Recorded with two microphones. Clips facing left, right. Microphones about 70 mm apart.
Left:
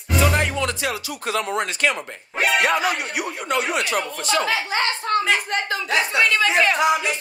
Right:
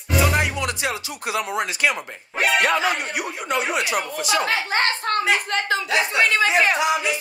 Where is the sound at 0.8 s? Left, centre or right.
Centre.